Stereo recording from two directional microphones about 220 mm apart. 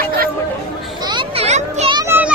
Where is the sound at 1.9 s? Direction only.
15° right (ahead or behind).